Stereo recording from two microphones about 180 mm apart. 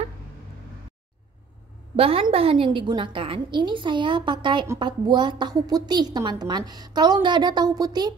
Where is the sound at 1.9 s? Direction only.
30° right (ahead or behind).